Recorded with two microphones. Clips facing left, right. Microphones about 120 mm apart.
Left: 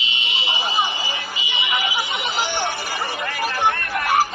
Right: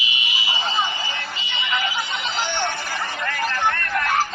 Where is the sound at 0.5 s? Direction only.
15° left (ahead or behind).